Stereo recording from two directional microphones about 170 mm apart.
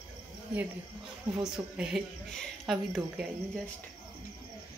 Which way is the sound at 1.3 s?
5° right (ahead or behind).